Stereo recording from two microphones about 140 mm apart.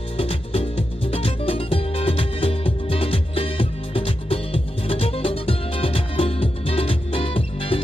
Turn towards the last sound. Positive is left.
turn(degrees=40)  # may be behind; listen again after turning